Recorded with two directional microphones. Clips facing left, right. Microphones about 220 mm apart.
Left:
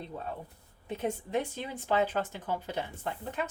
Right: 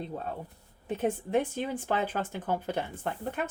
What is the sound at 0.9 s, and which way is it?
Speech, 50° right (ahead or behind).